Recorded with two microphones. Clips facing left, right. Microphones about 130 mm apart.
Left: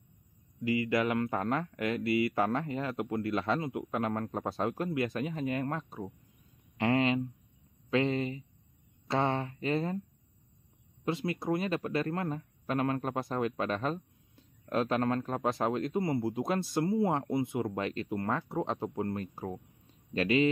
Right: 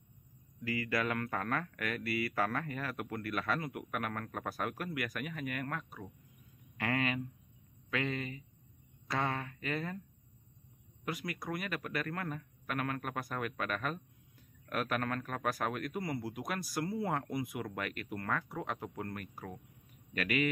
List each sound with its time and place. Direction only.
0.6 s speech: 20° left (ahead or behind)
6.8 s a sound: 25° left (ahead or behind)
7.9 s speech: 30° left (ahead or behind)
11.1 s speech: 25° left (ahead or behind)